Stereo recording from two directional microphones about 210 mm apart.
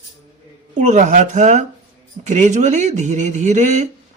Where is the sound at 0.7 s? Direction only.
35° right (ahead or behind).